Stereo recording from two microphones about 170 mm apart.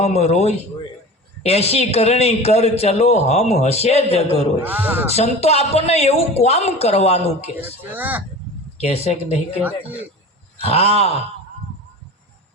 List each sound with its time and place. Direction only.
0.0 s a man's voice: 40° left (ahead or behind)
4.6 s a man's voice: 10° right (ahead or behind)
5.1 s a man's voice: 40° left (ahead or behind)
7.9 s a man's voice: 10° right (ahead or behind)
9.0 s a man's voice: 40° left (ahead or behind)
10.6 s a man's voice: 35° left (ahead or behind)